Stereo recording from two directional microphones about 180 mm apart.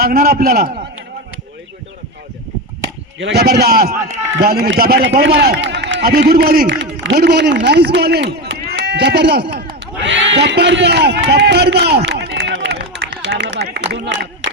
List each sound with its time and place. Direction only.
0.0 s a man's voice: 60° right (ahead or behind)
3.2 s a man's voice: 75° right (ahead or behind)
10.0 s a sound: 85° right